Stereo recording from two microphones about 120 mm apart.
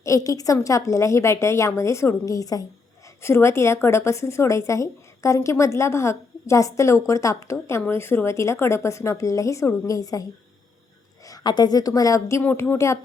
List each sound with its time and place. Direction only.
0.0 s speech: 25° left (ahead or behind)
11.3 s a woman's voice: 35° left (ahead or behind)
12.4 s speech: 15° left (ahead or behind)